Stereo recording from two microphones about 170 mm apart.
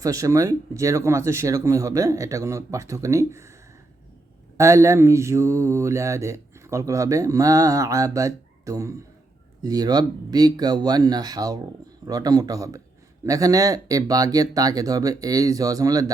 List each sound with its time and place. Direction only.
0.0 s mantra: 20° right (ahead or behind)
4.5 s mantra: 15° right (ahead or behind)
9.6 s speech: 20° right (ahead or behind)